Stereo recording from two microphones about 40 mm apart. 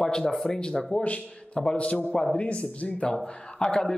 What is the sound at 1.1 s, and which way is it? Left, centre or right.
A man's voice, left.